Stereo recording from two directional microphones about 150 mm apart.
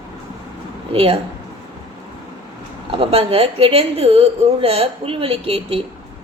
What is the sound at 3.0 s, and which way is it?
A woman's voice, 40° right (ahead or behind).